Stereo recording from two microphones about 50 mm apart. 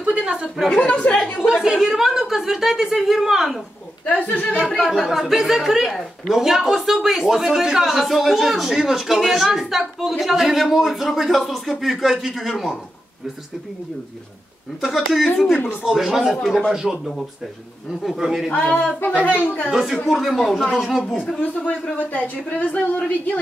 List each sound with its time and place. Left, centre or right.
0.0 s chuckle: right
0.7 s a woman's voice: centre
1.4 s a woman's voice: centre
4.0 s speech: left
4.6 s speech: centre
14.8 s speech: centre
16.7 s a woman's voice: centre
18.0 s speech: centre
18.5 s a woman's voice: left
19.7 s a woman's voice: centre
21.4 s speech: left